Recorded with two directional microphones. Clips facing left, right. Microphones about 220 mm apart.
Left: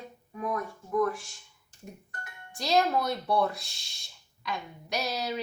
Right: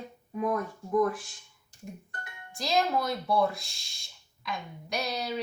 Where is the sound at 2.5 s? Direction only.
Centre (ahead or behind).